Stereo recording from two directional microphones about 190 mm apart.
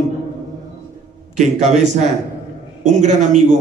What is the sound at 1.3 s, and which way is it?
A man's voice, 40° right (ahead or behind).